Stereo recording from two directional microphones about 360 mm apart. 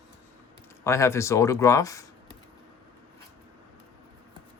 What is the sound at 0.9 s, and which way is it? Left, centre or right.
Speech, centre.